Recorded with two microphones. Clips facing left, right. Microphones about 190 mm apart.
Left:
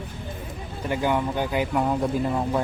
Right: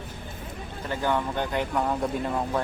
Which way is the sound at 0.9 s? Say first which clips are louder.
Left 3 dB; 10° left (ahead or behind).